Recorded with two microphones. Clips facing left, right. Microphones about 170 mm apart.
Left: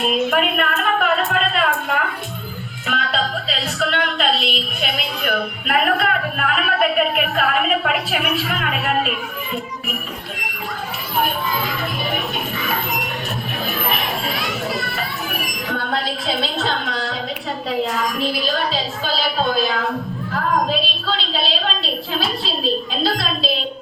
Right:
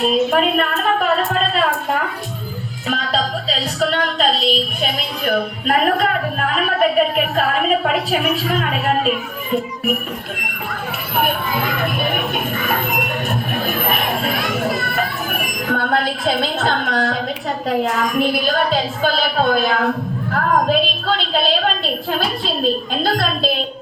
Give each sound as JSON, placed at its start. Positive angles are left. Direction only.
{"t": 0.0, "sound": "music", "side_deg": -30}
{"t": 2.8, "sound": "a woman's voice", "side_deg": -40}
{"t": 11.2, "sound": "a woman's voice", "side_deg": -55}
{"t": 13.7, "sound": "children playing", "side_deg": -50}
{"t": 17.7, "sound": "a woman's voice", "side_deg": -50}
{"t": 20.3, "sound": "a sound", "side_deg": -50}